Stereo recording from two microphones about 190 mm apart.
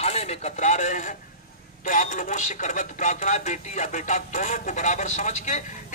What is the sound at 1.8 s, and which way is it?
Speech, 40° left (ahead or behind).